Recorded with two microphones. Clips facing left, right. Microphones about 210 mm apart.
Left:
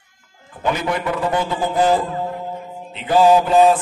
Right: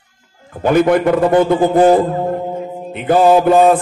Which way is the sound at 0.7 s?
55° right (ahead or behind).